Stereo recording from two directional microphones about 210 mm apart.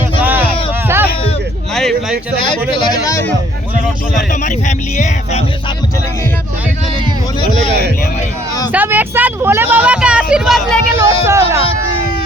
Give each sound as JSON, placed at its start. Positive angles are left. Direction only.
{"t": 1.7, "sound": "a sound", "side_deg": 0}
{"t": 2.7, "sound": "speech", "side_deg": 20}
{"t": 4.3, "sound": "speech", "side_deg": 35}
{"t": 8.7, "sound": "speech", "side_deg": -10}
{"t": 10.9, "sound": "speech", "side_deg": -15}